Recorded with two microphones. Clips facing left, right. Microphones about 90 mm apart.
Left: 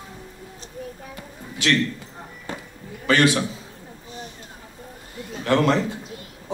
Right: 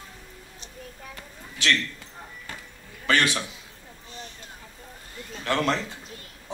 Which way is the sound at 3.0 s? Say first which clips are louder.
Left 5 dB; 20° left (ahead or behind).